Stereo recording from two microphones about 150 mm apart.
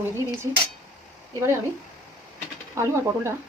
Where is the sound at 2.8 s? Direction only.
15° right (ahead or behind).